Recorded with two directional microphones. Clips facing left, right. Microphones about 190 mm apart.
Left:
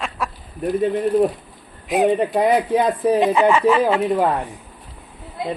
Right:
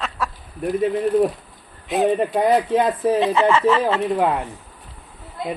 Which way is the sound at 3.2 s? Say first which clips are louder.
Left 2 dB; 15° left (ahead or behind).